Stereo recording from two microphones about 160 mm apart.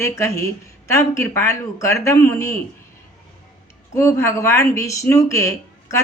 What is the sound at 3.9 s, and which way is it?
Speech, 15° left (ahead or behind).